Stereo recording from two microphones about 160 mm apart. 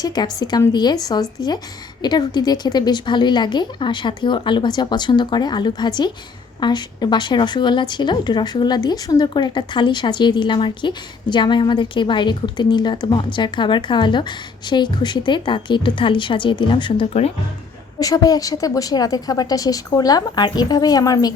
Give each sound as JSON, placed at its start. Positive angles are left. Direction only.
{"t": 0.0, "sound": "a woman's voice", "side_deg": 25}
{"t": 18.0, "sound": "a woman's voice", "side_deg": 20}